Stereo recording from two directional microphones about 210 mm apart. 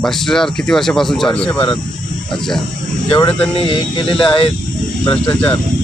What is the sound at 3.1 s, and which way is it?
Speech, 25° left (ahead or behind).